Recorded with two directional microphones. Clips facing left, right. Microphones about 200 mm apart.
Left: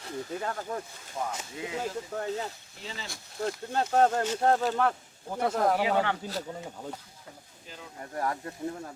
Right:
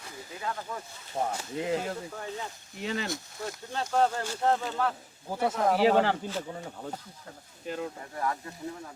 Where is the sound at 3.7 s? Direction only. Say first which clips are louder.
Left 2 dB; 50° left (ahead or behind).